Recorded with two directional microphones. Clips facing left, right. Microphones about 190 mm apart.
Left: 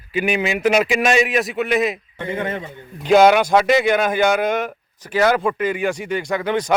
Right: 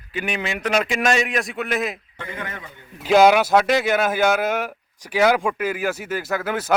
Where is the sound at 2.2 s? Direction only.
25° left (ahead or behind).